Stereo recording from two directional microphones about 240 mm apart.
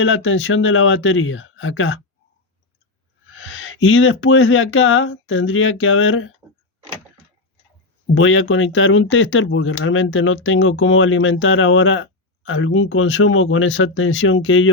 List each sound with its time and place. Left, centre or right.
0.0 s speech: left
3.4 s speech: left
8.1 s speech: left